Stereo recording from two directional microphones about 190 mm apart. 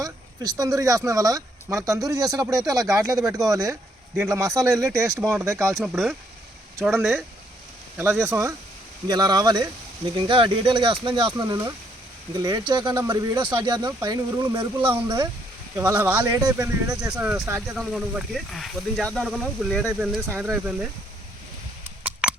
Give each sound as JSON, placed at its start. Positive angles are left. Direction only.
{"t": 0.0, "sound": "speech", "side_deg": -20}
{"t": 5.8, "sound": "speech", "side_deg": -5}
{"t": 8.2, "sound": "speech", "side_deg": -15}
{"t": 17.2, "sound": "speech", "side_deg": -5}
{"t": 22.0, "sound": "a sound", "side_deg": -5}